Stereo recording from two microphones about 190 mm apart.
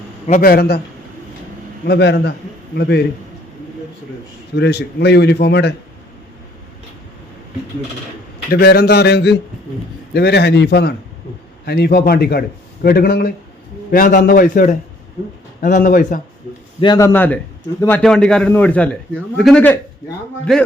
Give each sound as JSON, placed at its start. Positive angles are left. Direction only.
{"t": 0.3, "sound": "a man's voice", "side_deg": 50}
{"t": 1.9, "sound": "a man's voice", "side_deg": 60}
{"t": 4.5, "sound": "a man's voice", "side_deg": 60}
{"t": 8.4, "sound": "a man's voice", "side_deg": 55}
{"t": 16.8, "sound": "a man's voice", "side_deg": 20}